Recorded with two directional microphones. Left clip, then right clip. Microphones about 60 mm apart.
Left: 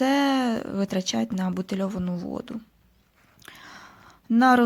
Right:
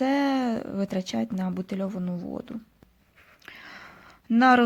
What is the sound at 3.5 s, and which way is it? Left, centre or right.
Whispering, left.